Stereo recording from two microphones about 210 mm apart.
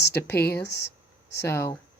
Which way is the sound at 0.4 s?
50° left (ahead or behind).